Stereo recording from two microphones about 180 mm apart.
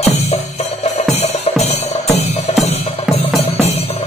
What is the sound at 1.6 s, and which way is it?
Music, 35° left (ahead or behind).